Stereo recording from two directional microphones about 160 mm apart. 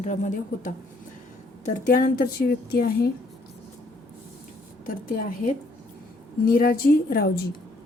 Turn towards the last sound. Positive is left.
turn(degrees=65)  # may be behind; listen again after turning